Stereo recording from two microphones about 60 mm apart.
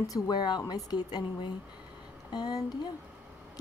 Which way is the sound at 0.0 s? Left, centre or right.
Left.